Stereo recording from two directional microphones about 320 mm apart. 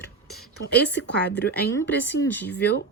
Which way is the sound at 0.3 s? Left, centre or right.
Centre.